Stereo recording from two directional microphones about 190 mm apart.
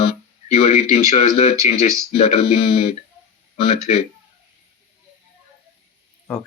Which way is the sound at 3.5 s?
30° left (ahead or behind).